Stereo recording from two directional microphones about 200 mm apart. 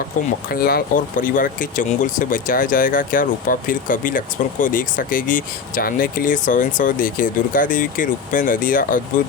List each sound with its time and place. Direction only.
0.5 s speech: 45° left (ahead or behind)